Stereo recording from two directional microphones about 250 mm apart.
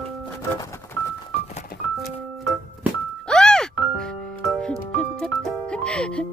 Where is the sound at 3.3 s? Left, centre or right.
Centre.